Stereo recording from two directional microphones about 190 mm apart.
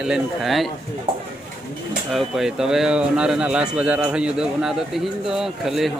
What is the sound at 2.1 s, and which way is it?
Speech, centre (ahead or behind).